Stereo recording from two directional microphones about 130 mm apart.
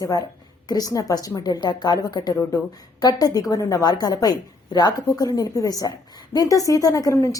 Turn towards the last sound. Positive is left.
turn(degrees=25)  # may be behind; listen again after turning